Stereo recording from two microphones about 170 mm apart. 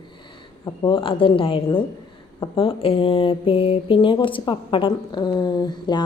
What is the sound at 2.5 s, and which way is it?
Mantra, 35° left (ahead or behind).